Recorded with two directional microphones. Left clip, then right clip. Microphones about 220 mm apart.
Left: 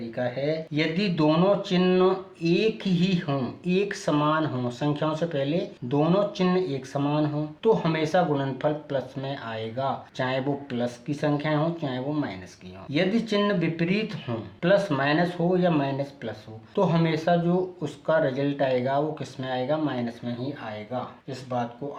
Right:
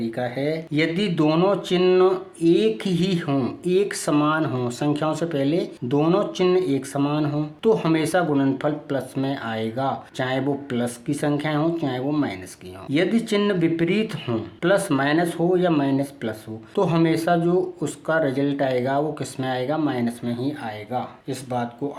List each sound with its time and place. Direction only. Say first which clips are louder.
0.0 s speech: right 3 dB; 45° right (ahead or behind)